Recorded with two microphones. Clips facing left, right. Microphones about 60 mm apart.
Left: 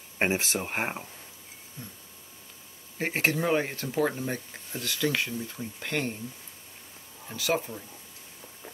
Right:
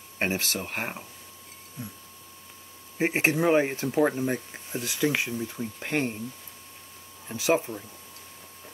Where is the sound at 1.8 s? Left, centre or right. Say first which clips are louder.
Right 5 dB; centre.